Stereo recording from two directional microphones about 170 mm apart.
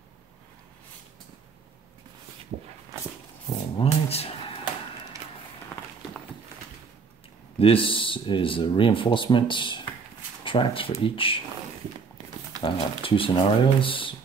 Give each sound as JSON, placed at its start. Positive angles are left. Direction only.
{"t": 3.7, "sound": "a sound", "side_deg": 35}
{"t": 7.5, "sound": "speech", "side_deg": 35}
{"t": 12.6, "sound": "speech", "side_deg": 30}